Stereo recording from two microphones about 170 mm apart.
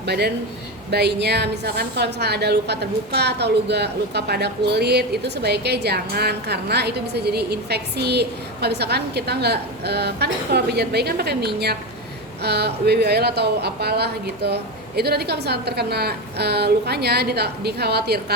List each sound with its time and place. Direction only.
0.0 s a woman's voice: 75° right (ahead or behind)